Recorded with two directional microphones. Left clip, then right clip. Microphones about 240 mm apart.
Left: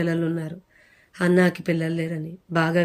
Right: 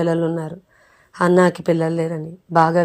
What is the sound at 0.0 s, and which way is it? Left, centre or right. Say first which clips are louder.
Speech: right 6 dB; centre.